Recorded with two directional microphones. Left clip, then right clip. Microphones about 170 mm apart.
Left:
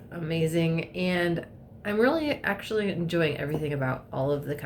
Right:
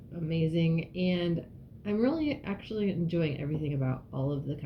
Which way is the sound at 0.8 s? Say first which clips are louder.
Left 5 dB; 5° right (ahead or behind).